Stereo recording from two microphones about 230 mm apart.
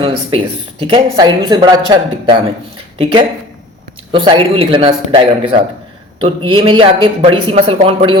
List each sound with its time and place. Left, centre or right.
0.0 s speech: right